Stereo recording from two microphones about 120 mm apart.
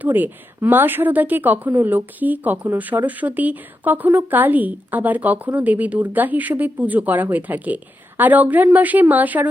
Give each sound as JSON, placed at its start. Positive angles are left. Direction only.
{"t": 0.0, "sound": "speech", "side_deg": -15}